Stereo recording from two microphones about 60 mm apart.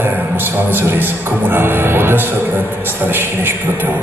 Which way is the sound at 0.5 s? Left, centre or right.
Right.